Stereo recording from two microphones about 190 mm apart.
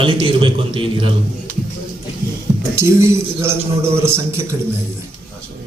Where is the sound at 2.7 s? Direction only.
15° right (ahead or behind).